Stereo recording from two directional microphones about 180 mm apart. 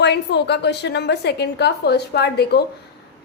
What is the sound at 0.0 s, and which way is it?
A woman's voice, 70° left (ahead or behind).